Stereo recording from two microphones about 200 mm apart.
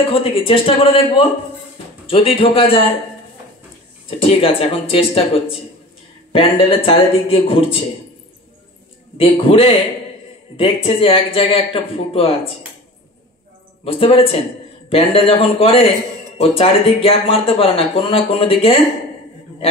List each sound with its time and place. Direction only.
0.1 s speech: 25° left (ahead or behind)
4.2 s speech: 30° left (ahead or behind)
9.2 s speech: 25° left (ahead or behind)
13.8 s speech: 30° left (ahead or behind)